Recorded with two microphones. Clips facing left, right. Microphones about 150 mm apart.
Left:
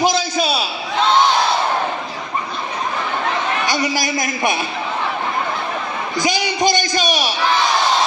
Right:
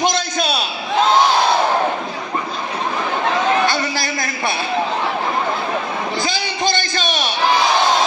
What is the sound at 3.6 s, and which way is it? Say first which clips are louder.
A man's voice: even; 15° left (ahead or behind).